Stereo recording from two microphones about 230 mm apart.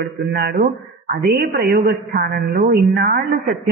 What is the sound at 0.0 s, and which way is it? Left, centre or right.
A man's voice, right.